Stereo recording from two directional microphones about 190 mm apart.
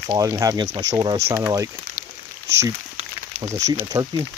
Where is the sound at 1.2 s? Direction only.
15° right (ahead or behind).